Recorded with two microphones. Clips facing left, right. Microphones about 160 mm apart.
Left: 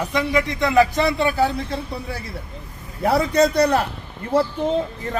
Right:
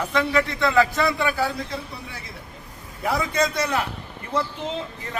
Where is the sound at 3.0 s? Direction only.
40° left (ahead or behind).